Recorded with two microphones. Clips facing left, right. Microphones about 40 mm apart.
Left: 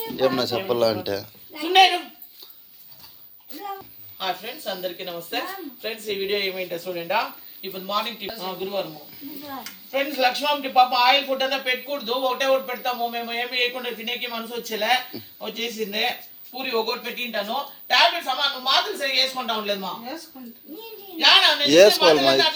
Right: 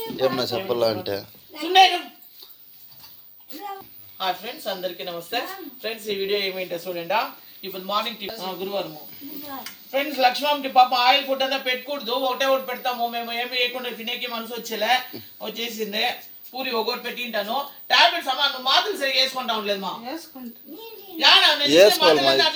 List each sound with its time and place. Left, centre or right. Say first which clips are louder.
0.0 s speech: left 1 dB; centre
1.5 s a sound: right 1 dB; centre
3.5 s a woman's voice: left 1 dB; centre
21.7 s a woman's voice: left 1 dB; right
22.0 s speech: left 1 dB; centre